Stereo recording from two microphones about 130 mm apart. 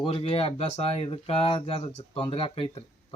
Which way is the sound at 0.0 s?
45° left (ahead or behind).